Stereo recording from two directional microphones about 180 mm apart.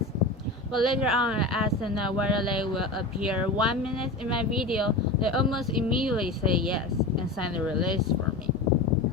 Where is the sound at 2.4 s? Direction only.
25° left (ahead or behind).